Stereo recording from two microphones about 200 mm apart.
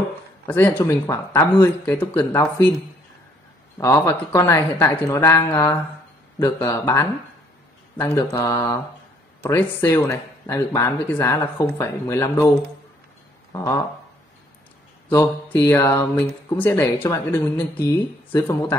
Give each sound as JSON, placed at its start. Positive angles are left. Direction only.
{"t": 0.5, "sound": "speech", "side_deg": 10}
{"t": 3.7, "sound": "speech", "side_deg": 15}
{"t": 13.5, "sound": "a sound", "side_deg": 15}
{"t": 15.0, "sound": "speech", "side_deg": 10}